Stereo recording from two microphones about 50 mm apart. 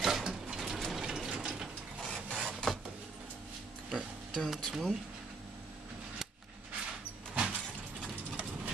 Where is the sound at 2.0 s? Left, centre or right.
Centre.